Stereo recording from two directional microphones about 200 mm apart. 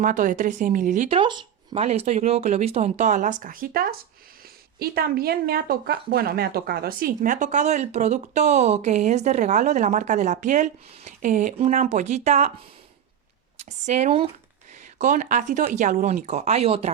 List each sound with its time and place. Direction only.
0.0 s speech: 40° right (ahead or behind)
13.6 s speech: 35° right (ahead or behind)